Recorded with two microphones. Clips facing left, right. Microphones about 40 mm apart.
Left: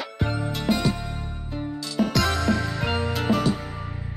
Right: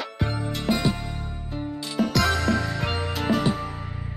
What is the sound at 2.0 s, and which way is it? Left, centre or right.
Music, centre.